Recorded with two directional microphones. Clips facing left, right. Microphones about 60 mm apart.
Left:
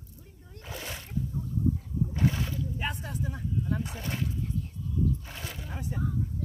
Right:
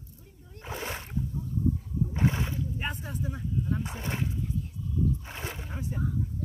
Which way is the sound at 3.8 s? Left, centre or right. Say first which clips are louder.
Right 1 dB; right.